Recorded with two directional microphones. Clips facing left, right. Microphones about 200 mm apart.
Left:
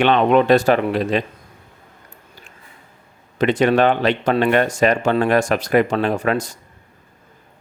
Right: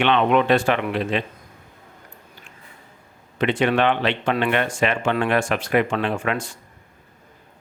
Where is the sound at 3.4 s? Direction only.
40° left (ahead or behind).